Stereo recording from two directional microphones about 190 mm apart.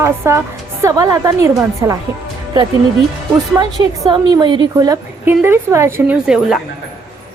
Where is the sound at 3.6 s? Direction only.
25° right (ahead or behind); by 6.6 s 5° right (ahead or behind).